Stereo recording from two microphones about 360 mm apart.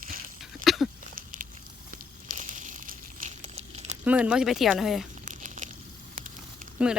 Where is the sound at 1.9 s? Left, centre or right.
Right.